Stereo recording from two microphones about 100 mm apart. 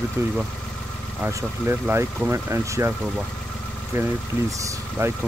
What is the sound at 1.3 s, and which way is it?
Speech, 30° right (ahead or behind).